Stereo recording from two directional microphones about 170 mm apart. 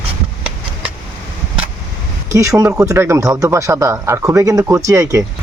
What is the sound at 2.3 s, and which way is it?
Speech, 20° right (ahead or behind).